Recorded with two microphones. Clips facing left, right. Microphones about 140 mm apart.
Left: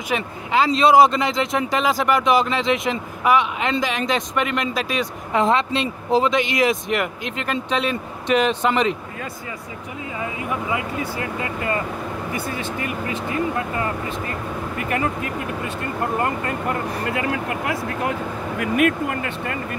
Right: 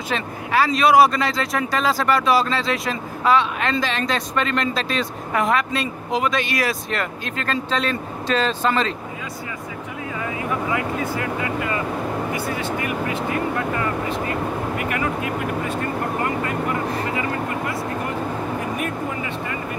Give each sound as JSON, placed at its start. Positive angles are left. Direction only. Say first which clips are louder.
{"t": 0.1, "sound": "speech", "louder": "left 1 dB", "side_deg": 20}
{"t": 5.4, "sound": "speech", "louder": "left 2 dB", "side_deg": 25}
{"t": 17.1, "sound": "speech", "louder": "even", "side_deg": 75}